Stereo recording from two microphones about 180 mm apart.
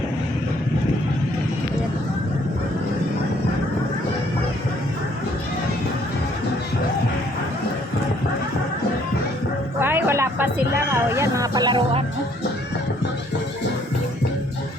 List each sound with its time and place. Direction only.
9.8 s music: 15° right (ahead or behind)